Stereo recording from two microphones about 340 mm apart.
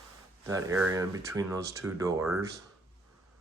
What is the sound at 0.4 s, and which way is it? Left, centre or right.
Speech, centre.